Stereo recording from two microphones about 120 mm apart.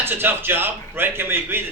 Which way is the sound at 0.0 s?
15° right (ahead or behind).